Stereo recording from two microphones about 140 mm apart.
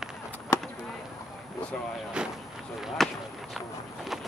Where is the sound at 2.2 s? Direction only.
5° right (ahead or behind).